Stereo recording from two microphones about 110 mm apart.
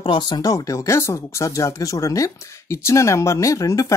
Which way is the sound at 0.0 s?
45° left (ahead or behind).